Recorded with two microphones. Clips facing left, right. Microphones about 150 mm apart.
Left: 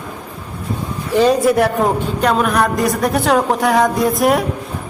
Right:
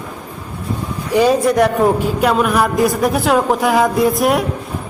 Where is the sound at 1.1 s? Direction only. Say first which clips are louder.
Even; 10° right (ahead or behind).